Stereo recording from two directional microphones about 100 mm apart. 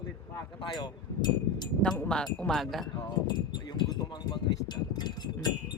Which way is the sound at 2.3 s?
5° left (ahead or behind).